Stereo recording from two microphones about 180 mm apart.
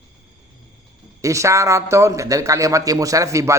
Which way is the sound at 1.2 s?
15° right (ahead or behind).